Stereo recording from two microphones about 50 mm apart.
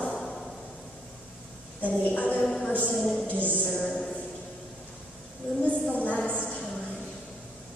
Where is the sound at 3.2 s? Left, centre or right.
Right.